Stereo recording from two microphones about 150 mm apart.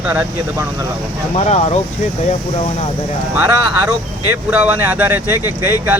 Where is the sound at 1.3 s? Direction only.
45° left (ahead or behind).